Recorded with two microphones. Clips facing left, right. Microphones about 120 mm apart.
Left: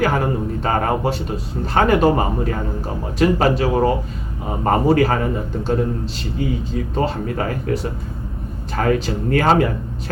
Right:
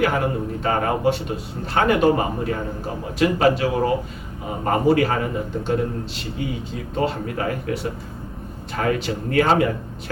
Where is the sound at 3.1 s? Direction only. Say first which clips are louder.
Left 2 dB; 40° left (ahead or behind).